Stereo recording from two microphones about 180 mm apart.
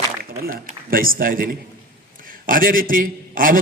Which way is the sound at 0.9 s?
50° right (ahead or behind).